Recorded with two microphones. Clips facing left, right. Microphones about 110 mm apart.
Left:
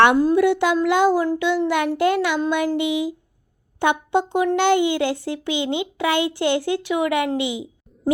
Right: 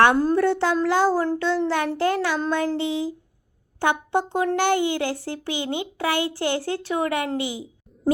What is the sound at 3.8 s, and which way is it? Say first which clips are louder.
Speech: left 3 dB; 20° left (ahead or behind).